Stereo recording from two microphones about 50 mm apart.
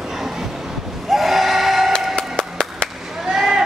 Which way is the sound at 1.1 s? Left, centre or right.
Centre.